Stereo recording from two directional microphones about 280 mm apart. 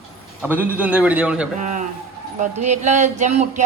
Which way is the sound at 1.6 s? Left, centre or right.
Right.